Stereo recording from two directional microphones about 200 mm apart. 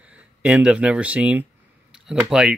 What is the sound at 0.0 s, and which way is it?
Speech, 5° right (ahead or behind).